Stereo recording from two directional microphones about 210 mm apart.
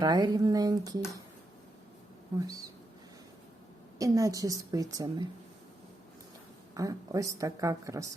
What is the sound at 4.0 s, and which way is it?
A woman's voice, 15° right (ahead or behind).